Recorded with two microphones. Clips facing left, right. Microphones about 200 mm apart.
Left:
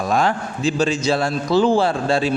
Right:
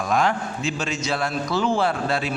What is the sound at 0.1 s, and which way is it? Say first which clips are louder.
A man's voice: left 1 dB; 30° left (ahead or behind).